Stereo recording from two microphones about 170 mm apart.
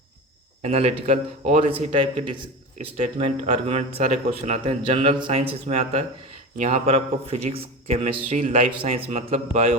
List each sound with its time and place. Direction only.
0.6 s a man's voice: 35° right (ahead or behind)
3.0 s a man's voice: 40° right (ahead or behind)